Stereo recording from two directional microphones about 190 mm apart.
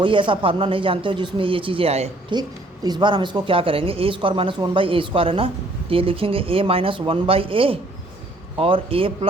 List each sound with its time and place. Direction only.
0.0 s speech: 25° right (ahead or behind)
2.3 s speech: 20° right (ahead or behind)